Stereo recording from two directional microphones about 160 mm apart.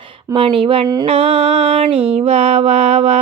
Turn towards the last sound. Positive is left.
turn(degrees=-40)  # may be behind; listen again after turning